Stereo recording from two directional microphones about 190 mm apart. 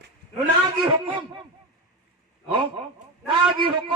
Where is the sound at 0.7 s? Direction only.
25° right (ahead or behind).